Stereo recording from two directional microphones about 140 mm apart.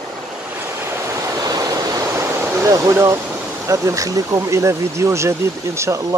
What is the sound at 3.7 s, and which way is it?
Speech, 25° right (ahead or behind).